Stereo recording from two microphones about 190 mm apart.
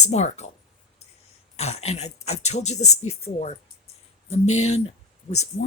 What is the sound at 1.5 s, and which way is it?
Speech, 35° left (ahead or behind).